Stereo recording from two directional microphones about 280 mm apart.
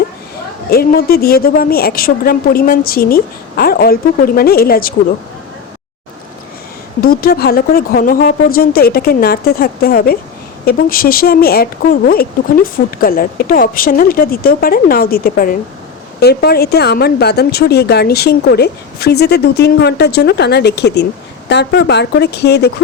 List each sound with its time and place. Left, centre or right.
0.7 s speech: left
7.0 s speech: left